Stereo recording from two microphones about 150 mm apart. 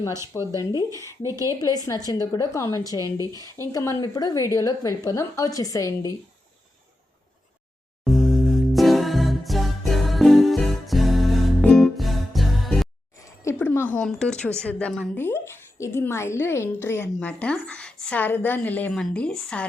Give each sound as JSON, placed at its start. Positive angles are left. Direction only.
{"t": 0.1, "sound": "speech", "side_deg": -20}
{"t": 0.5, "sound": "a woman's voice", "side_deg": 25}
{"t": 1.0, "sound": "speech", "side_deg": -20}
{"t": 1.6, "sound": "a woman's voice", "side_deg": 25}
{"t": 3.0, "sound": "speech", "side_deg": -25}
{"t": 3.7, "sound": "a woman's voice", "side_deg": 25}
{"t": 8.7, "sound": "music", "side_deg": 0}
{"t": 13.2, "sound": "a woman's voice", "side_deg": 20}